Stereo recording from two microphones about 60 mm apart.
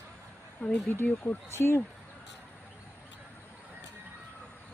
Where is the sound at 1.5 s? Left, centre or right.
Left.